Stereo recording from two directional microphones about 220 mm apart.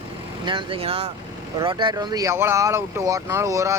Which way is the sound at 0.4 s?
25° right (ahead or behind).